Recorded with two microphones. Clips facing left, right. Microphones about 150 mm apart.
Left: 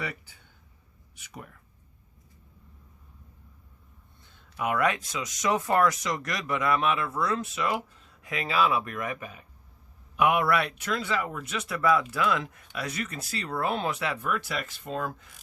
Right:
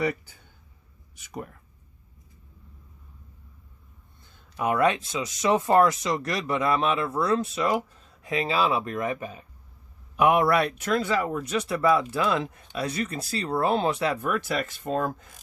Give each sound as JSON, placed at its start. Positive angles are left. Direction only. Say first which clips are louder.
{"t": 0.0, "sound": "speech", "louder": "right 9 dB", "side_deg": -40}
{"t": 4.4, "sound": "speech", "louder": "right 4 dB", "side_deg": -35}